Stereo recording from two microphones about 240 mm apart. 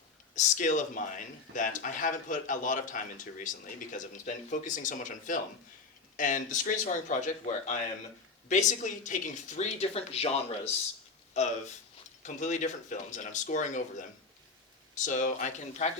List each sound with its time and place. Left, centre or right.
0.3 s speech: left
11.3 s speech: left
14.9 s speech: left